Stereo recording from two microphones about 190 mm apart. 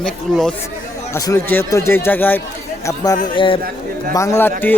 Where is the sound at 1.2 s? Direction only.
15° left (ahead or behind).